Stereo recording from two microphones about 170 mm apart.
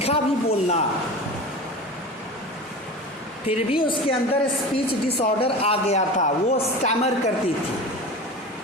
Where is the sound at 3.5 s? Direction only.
35° left (ahead or behind).